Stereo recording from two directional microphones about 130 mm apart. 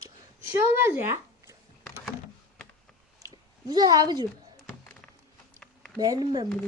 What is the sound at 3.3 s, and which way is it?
Speech, 30° right (ahead or behind).